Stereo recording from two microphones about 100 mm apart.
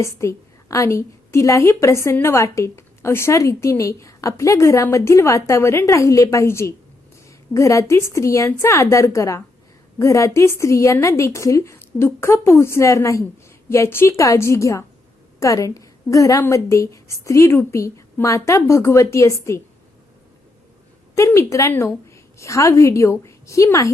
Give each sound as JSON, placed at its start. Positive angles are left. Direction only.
{"t": 0.0, "sound": "a woman's voice", "side_deg": 30}
{"t": 21.2, "sound": "a woman's voice", "side_deg": 30}